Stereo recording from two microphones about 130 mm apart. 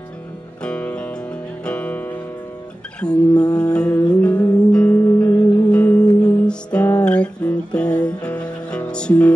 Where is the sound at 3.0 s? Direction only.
5° left (ahead or behind).